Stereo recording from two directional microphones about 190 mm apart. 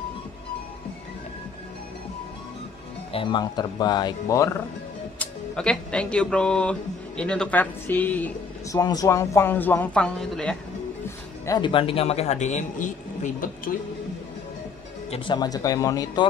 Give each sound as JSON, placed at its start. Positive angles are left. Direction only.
{"t": 3.1, "sound": "speech", "side_deg": 25}
{"t": 5.2, "sound": "speech", "side_deg": 5}
{"t": 8.7, "sound": "a man's voice", "side_deg": 20}
{"t": 11.1, "sound": "a man's voice", "side_deg": 20}
{"t": 15.0, "sound": "speech", "side_deg": 25}